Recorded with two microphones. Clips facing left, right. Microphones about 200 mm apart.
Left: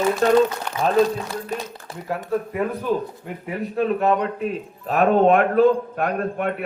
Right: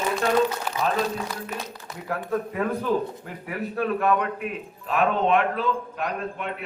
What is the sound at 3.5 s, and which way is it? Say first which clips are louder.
Speech: left 4 dB; 25° left (ahead or behind).